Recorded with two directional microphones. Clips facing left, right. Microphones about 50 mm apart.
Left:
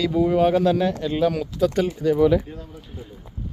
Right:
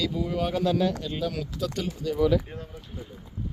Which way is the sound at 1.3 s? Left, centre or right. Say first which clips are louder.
Left 9 dB; left.